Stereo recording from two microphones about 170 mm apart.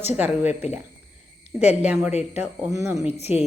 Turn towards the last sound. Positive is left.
turn(degrees=35)  # may be behind; listen again after turning